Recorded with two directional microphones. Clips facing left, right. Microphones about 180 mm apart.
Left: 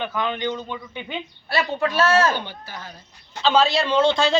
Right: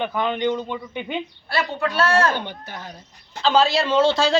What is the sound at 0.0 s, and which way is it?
A man's voice, 15° right (ahead or behind).